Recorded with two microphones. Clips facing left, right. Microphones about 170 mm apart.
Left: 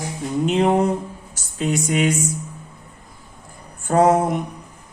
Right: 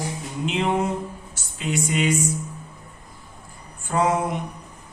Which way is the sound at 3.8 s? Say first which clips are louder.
Left 6 dB; 45° left (ahead or behind).